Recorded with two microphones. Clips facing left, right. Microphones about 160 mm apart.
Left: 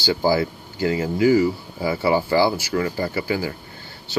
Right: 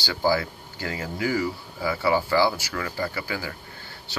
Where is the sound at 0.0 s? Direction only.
25° left (ahead or behind).